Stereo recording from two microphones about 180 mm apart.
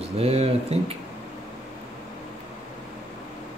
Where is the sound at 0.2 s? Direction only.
35° right (ahead or behind).